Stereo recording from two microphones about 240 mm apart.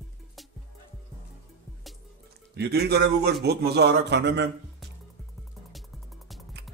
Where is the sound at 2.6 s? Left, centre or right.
Right.